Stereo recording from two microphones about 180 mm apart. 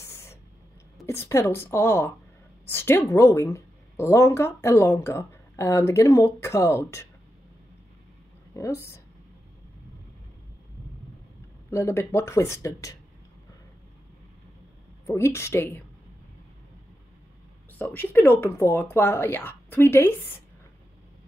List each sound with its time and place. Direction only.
0.0 s a sound: 15° left (ahead or behind)
1.0 s a woman's voice: 15° left (ahead or behind)
8.5 s a woman's voice: 15° left (ahead or behind)
11.7 s a woman's voice: 15° left (ahead or behind)
15.0 s a woman's voice: 15° left (ahead or behind)
17.7 s a woman's voice: 10° left (ahead or behind)